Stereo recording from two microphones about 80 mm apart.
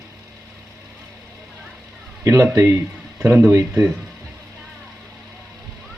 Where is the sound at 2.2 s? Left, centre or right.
Right.